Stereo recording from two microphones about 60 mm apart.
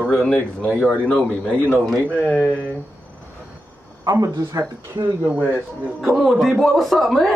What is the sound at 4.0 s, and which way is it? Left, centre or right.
Speech, right.